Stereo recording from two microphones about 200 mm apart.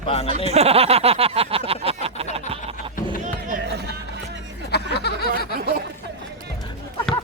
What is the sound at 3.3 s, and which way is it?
Run, 40° right (ahead or behind).